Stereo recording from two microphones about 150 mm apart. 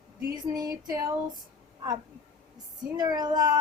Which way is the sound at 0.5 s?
25° right (ahead or behind).